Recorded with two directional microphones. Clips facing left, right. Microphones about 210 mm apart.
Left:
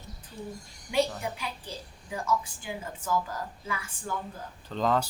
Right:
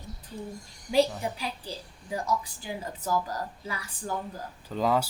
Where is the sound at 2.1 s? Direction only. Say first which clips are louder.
Even; 35° right (ahead or behind).